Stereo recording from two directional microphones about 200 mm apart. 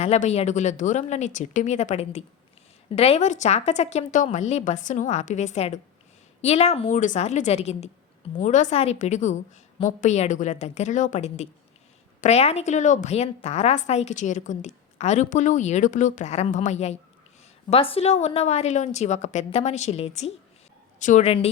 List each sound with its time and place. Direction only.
0.0 s a woman's voice: 35° left (ahead or behind)